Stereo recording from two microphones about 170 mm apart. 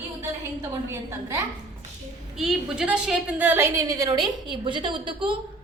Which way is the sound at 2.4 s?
5° right (ahead or behind).